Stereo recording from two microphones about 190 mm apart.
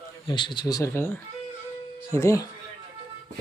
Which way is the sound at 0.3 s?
25° left (ahead or behind).